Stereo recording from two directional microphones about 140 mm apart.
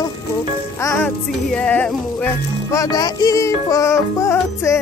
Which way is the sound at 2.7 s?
25° left (ahead or behind).